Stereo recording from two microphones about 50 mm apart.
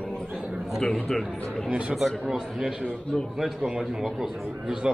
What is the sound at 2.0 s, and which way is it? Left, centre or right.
A man's voice, centre.